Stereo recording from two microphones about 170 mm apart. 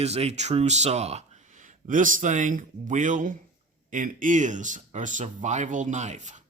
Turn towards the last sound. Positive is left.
turn(degrees=-45)  # may be behind; listen again after turning